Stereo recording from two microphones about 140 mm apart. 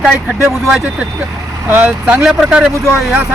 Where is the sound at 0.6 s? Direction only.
5° right (ahead or behind).